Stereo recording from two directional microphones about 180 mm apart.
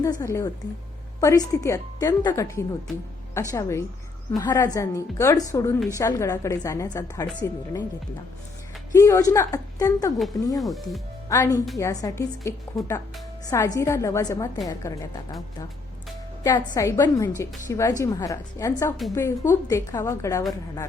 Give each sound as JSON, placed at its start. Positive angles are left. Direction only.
{"t": 0.0, "sound": "a woman's voice", "side_deg": 20}
{"t": 9.0, "sound": "a woman's voice", "side_deg": 15}
{"t": 10.6, "sound": "speech", "side_deg": 0}
{"t": 11.3, "sound": "a woman's voice", "side_deg": 20}